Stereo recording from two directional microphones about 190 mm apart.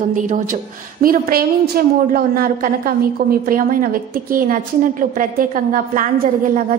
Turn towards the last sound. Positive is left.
turn(degrees=-45)  # may be behind; listen again after turning